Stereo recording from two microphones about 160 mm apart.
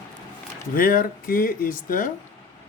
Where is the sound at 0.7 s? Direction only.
65° left (ahead or behind).